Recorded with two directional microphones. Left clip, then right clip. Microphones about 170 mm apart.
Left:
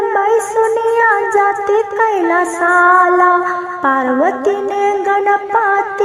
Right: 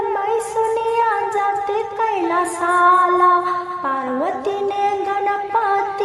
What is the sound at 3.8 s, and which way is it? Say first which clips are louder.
Music: left 10 dB; 40° left (ahead or behind).